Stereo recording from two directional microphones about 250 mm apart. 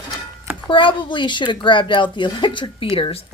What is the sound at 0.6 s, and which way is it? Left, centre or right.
A woman's voice, centre.